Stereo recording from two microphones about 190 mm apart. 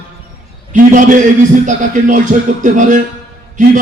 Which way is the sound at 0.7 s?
45° right (ahead or behind).